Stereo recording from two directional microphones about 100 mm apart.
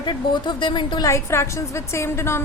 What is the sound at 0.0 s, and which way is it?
A woman's voice, 50° left (ahead or behind).